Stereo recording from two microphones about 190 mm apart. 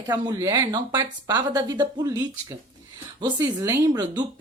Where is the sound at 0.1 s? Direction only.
20° right (ahead or behind).